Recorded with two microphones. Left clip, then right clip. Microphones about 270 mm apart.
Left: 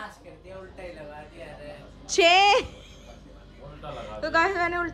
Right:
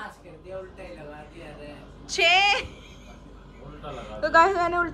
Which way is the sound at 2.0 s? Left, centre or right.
Left.